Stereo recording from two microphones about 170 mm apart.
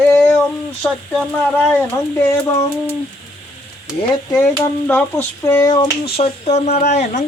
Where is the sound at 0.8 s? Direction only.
Centre (ahead or behind).